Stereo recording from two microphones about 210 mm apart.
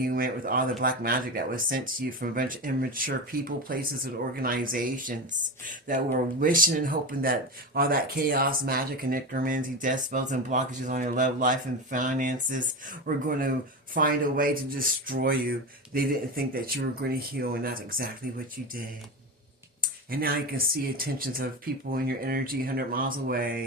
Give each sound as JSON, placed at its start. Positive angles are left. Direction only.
{"t": 0.0, "sound": "speech", "side_deg": -45}
{"t": 19.8, "sound": "speech", "side_deg": -45}